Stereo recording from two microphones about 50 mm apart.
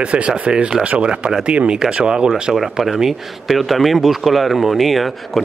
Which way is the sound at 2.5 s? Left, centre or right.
Centre.